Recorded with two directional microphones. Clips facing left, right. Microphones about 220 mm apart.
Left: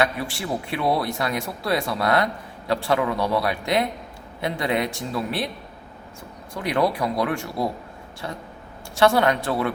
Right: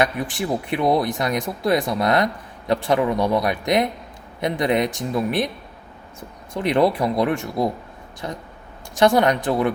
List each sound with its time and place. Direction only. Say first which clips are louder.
0.0 s speech: right 2 dB; 20° right (ahead or behind)